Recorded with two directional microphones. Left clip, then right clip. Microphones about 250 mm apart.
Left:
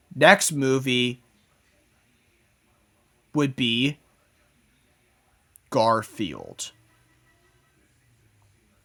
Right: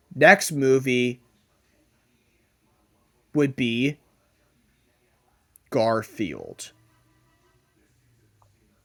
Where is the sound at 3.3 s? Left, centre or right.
Centre.